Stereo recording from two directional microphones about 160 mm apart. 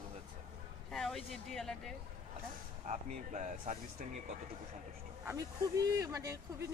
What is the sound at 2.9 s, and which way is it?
Speech, 50° right (ahead or behind).